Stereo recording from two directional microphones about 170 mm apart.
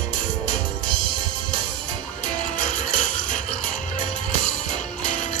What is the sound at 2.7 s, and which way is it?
Music, 45° left (ahead or behind).